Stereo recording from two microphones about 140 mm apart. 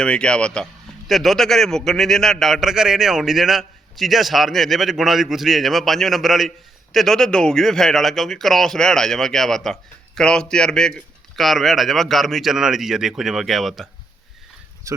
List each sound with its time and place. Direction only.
0.0 s a man's voice: 5° left (ahead or behind)
14.9 s speech: 20° right (ahead or behind)